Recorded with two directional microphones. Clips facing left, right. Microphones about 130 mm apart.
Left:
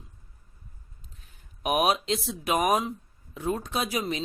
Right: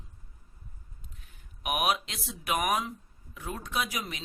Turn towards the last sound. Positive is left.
turn(degrees=30)  # may be behind; listen again after turning